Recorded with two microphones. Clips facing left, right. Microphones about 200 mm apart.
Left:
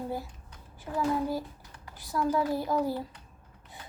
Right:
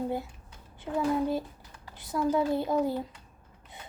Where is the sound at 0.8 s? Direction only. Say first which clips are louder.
Right 2 dB; 25° right (ahead or behind).